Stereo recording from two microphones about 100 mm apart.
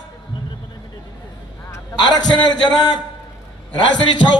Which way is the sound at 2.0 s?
50° left (ahead or behind).